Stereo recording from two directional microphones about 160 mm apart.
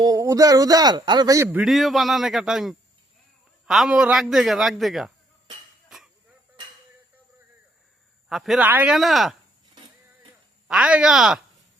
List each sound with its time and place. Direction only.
0.0 s speech: 20° right (ahead or behind)
1.7 s a man's voice: centre (ahead or behind)
8.3 s a man's voice: centre (ahead or behind)
9.0 s a man's voice: centre (ahead or behind)
10.7 s a man's voice: 5° right (ahead or behind)